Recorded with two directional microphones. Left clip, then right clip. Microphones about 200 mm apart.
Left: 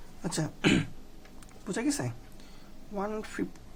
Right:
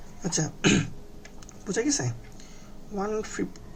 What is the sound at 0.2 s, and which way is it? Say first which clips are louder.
Speech: right 4 dB; 35° left (ahead or behind).